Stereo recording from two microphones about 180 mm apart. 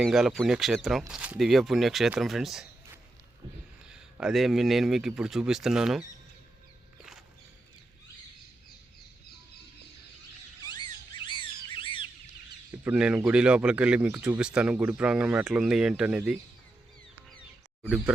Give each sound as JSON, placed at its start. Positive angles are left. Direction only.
{"t": 0.0, "sound": "speech", "side_deg": 0}
{"t": 4.2, "sound": "speech", "side_deg": 0}
{"t": 10.6, "sound": "a sound", "side_deg": 25}
{"t": 12.8, "sound": "speech", "side_deg": -5}
{"t": 17.8, "sound": "speech", "side_deg": -10}